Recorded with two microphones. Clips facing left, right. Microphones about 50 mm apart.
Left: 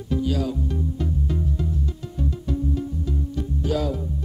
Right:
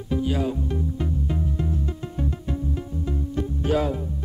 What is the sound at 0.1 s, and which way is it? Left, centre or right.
Music, right.